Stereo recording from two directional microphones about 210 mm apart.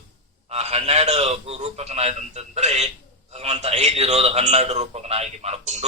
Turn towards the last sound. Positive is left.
turn(degrees=-30)  # may be behind; listen again after turning